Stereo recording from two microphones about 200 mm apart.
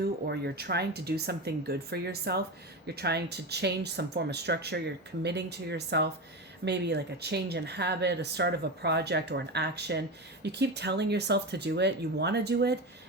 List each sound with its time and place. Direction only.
0.0 s speech: 55° right (ahead or behind)